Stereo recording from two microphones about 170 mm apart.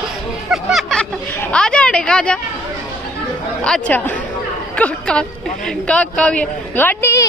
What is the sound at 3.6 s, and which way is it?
Speech, 5° left (ahead or behind).